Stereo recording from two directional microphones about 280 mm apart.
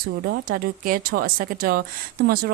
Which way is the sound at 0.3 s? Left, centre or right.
Right.